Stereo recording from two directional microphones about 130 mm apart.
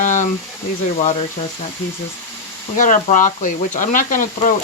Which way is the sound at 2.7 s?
85° left.